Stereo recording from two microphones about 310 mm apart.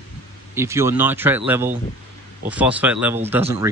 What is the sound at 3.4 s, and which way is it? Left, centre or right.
Speech, centre.